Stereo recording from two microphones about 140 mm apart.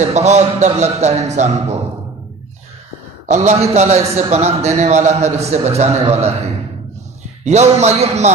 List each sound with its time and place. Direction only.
0.0 s a man's voice: 55° right (ahead or behind)
3.3 s a man's voice: 55° right (ahead or behind)
7.4 s a man's voice: 50° right (ahead or behind)